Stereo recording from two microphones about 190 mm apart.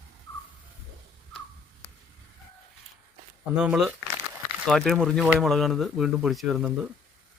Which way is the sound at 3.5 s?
5° right (ahead or behind).